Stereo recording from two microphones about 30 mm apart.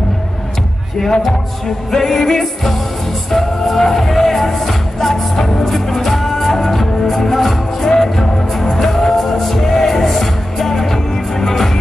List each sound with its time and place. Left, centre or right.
1.9 s music: centre